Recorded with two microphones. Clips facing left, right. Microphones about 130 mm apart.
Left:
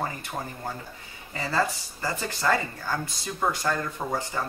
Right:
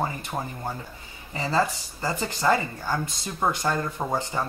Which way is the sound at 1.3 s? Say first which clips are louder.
Right 2 dB; 20° right (ahead or behind).